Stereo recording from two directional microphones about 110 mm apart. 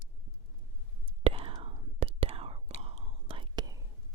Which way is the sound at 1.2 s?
55° right (ahead or behind).